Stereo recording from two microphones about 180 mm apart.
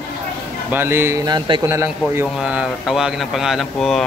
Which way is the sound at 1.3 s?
25° right (ahead or behind).